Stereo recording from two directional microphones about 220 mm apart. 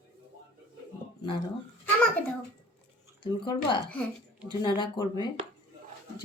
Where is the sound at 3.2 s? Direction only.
20° left (ahead or behind).